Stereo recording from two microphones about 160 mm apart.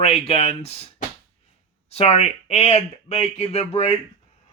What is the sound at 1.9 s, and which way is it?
Speech, 40° left (ahead or behind).